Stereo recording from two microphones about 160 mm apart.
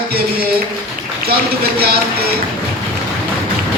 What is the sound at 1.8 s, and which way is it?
Music, 75° right (ahead or behind).